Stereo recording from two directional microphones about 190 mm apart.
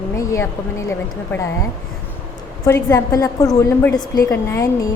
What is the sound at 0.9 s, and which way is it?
Speech, 15° left (ahead or behind).